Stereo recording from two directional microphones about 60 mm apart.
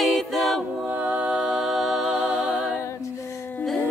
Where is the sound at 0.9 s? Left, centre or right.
Right.